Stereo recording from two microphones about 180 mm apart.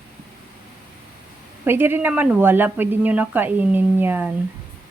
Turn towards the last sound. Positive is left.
turn(degrees=-10)  # may be behind; listen again after turning